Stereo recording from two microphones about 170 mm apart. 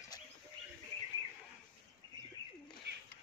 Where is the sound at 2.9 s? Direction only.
80° right.